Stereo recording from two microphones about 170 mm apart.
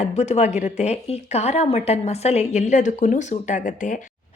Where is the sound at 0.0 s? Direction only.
40° left (ahead or behind).